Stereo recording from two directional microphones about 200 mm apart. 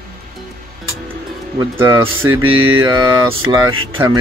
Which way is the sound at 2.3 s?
90° right.